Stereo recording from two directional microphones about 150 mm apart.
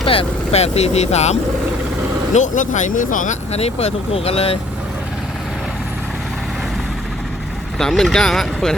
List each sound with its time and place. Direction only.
0.0 s speech: 35° left (ahead or behind)
7.8 s speech: centre (ahead or behind)